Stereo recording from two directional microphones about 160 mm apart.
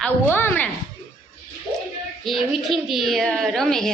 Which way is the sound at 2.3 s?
Centre (ahead or behind).